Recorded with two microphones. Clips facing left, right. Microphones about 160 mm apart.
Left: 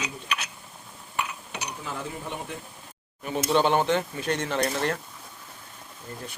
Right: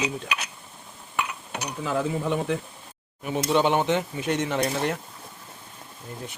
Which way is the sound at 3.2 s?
15° right (ahead or behind).